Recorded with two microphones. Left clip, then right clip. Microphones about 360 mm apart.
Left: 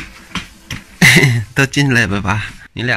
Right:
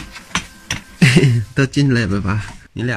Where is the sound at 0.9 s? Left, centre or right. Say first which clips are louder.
Left 7 dB; centre.